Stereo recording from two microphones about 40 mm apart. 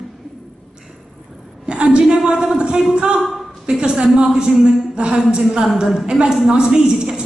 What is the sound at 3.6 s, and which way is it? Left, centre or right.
A woman's voice, centre.